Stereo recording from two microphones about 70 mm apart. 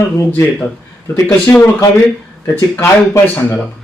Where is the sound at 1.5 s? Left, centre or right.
Left.